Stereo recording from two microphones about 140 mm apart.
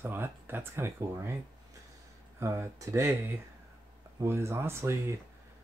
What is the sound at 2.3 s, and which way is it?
Speech, 20° right (ahead or behind).